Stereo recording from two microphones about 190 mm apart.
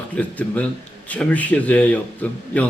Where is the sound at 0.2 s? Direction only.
10° left (ahead or behind).